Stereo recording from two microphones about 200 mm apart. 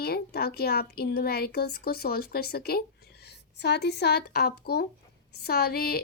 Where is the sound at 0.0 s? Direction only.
50° left (ahead or behind).